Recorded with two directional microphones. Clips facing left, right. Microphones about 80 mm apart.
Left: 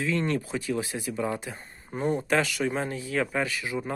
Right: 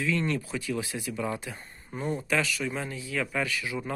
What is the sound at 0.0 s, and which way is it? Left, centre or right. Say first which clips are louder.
Speech: left 1 dB; left.